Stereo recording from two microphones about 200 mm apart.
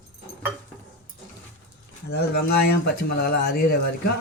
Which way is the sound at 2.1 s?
55° left (ahead or behind).